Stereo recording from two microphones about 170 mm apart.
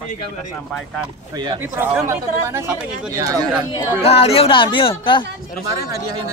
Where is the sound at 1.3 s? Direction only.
25° right (ahead or behind).